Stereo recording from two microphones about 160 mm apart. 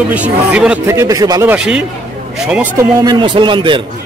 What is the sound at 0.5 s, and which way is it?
Speech, 5° right (ahead or behind).